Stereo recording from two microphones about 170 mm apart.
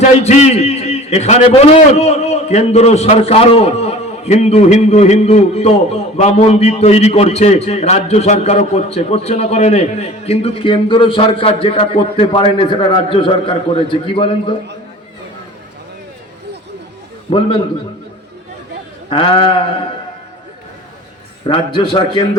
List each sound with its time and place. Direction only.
0.2 s a man's voice: 40° left (ahead or behind)
17.2 s a man's voice: 30° left (ahead or behind)
19.1 s a man's voice: 35° left (ahead or behind)
21.4 s a man's voice: 30° left (ahead or behind)